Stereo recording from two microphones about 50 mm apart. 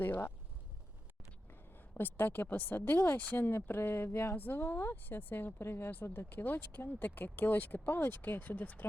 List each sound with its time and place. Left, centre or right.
0.0 s speech: left
1.9 s speech: left
5.6 s speech: left